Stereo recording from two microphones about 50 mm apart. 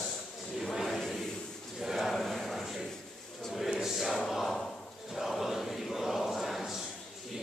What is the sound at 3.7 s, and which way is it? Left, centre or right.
Choir, centre.